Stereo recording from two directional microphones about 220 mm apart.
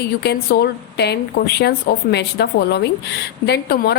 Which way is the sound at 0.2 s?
50° left (ahead or behind).